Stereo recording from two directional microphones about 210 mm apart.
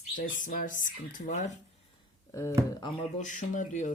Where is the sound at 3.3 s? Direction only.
35° left (ahead or behind).